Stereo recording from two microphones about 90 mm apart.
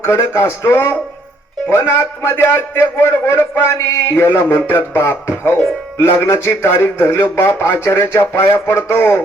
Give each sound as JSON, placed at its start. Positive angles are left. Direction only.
{"t": 0.0, "sound": "a man's voice", "side_deg": 30}